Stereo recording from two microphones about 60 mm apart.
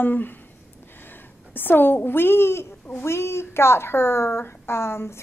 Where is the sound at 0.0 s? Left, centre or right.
Left.